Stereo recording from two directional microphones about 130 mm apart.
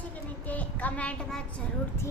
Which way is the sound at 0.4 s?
10° left (ahead or behind).